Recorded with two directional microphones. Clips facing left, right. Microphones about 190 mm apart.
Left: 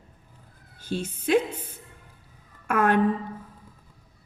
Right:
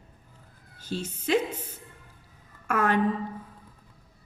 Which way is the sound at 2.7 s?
55° left (ahead or behind).